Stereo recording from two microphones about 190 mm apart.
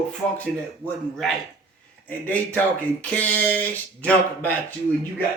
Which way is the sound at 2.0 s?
10° left (ahead or behind).